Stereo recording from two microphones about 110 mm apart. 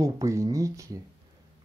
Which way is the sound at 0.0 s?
30° right (ahead or behind).